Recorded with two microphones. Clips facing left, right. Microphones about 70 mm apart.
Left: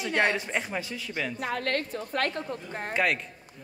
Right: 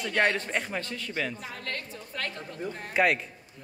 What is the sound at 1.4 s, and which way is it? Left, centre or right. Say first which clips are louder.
Speech: left 8 dB; left.